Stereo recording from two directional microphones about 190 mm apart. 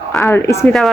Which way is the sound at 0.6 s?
Centre (ahead or behind).